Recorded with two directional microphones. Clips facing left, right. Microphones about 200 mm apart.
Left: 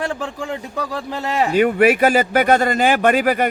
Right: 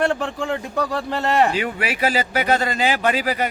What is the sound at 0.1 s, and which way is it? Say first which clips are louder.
A man's voice: right 2 dB; 5° left (ahead or behind).